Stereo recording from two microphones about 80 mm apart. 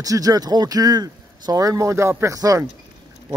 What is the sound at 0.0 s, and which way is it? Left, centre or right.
Speech, right.